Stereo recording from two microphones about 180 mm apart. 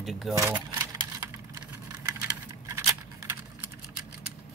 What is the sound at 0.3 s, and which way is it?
Keys jangling, 15° right (ahead or behind).